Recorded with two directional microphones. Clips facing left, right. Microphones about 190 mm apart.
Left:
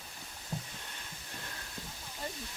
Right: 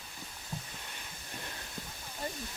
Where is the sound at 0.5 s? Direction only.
35° left (ahead or behind).